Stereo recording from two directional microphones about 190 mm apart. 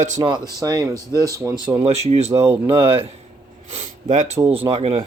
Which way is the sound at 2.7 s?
30° right (ahead or behind).